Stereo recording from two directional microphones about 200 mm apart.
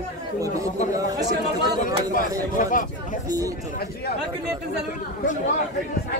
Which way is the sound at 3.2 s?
15° right (ahead or behind).